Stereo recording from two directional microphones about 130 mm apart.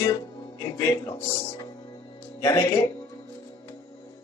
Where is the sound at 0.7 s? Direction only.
30° left (ahead or behind).